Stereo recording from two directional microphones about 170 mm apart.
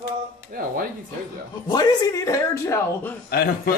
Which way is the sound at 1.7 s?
20° left (ahead or behind).